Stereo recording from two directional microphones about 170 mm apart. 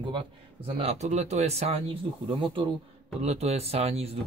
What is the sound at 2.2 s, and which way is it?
Speech, 30° right (ahead or behind).